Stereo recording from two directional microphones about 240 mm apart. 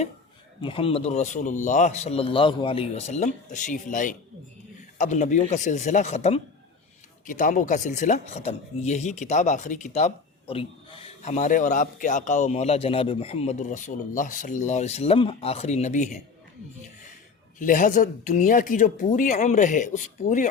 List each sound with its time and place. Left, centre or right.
0.6 s speech: left
17.6 s speech: left